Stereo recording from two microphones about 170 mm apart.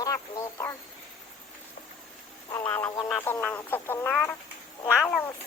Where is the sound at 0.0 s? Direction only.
20° left (ahead or behind).